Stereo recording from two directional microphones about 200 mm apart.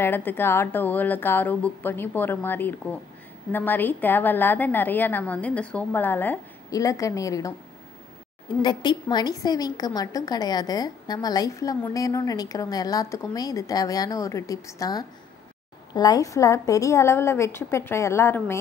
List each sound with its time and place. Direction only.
0.0 s a woman's voice: 10° left (ahead or behind)
8.6 s a woman's voice: 20° left (ahead or behind)